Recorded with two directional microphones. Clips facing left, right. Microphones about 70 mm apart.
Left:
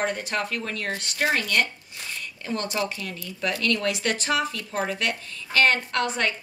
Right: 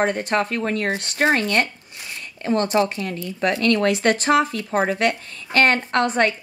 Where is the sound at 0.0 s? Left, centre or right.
Right.